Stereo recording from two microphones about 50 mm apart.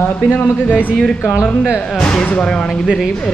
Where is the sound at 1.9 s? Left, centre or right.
Left.